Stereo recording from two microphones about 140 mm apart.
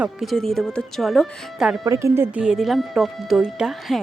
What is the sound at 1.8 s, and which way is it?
Speech, 25° right (ahead or behind).